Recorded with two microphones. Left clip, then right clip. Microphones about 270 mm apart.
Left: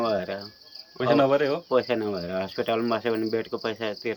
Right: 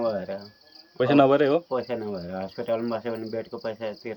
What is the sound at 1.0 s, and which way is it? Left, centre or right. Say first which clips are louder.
Speech: right 2 dB; right.